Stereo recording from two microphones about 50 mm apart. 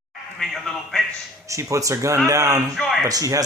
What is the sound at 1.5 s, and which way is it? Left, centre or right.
Speech, right.